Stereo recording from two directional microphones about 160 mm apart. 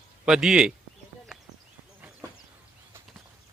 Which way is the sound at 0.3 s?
5° right (ahead or behind).